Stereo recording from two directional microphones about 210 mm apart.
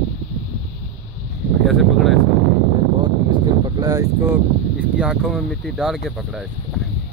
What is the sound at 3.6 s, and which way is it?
Speech, 15° right (ahead or behind).